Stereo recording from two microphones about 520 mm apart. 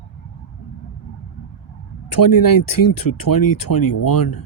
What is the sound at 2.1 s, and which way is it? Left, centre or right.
Speech, left.